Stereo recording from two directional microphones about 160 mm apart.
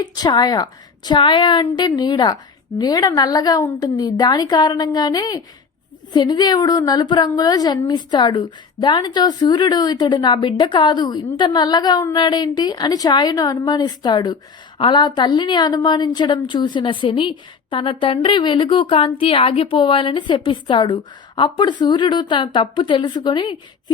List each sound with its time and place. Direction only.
0.0 s a woman's voice: 25° left (ahead or behind)